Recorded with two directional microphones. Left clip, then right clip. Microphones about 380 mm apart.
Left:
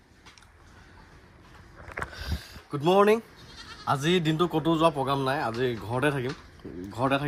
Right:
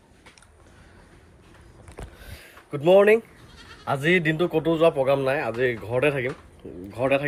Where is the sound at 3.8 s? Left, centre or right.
Centre.